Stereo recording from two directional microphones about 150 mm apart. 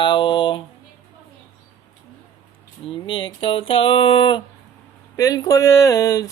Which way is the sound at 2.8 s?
35° left (ahead or behind).